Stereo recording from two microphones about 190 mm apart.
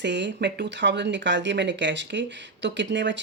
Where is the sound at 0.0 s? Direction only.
65° right (ahead or behind).